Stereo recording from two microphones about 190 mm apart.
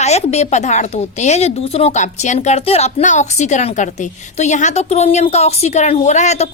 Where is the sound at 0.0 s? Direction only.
35° left (ahead or behind).